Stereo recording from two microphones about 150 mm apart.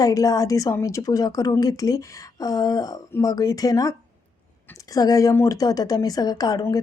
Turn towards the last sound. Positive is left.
turn(degrees=25)  # may be behind; listen again after turning